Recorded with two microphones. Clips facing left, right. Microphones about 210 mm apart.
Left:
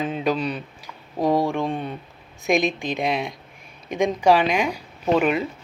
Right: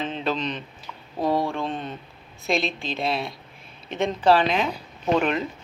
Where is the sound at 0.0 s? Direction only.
10° left (ahead or behind).